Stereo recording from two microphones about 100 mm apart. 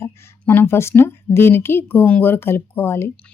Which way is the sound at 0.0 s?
25° left (ahead or behind).